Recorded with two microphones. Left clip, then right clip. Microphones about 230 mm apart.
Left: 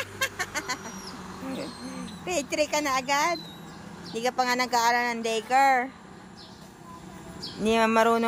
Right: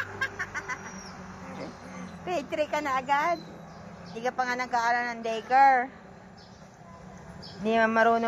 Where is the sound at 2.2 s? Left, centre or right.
Left.